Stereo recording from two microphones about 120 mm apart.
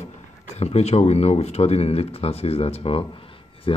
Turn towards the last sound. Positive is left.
turn(degrees=50)  # may be behind; listen again after turning